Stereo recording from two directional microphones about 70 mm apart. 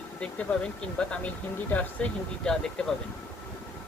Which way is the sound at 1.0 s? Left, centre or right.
Centre.